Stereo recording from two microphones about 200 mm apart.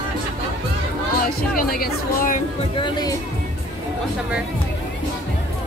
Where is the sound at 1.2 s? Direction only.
45° left (ahead or behind).